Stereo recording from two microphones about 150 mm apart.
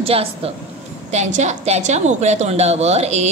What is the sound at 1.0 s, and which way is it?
A woman's voice, 50° right (ahead or behind).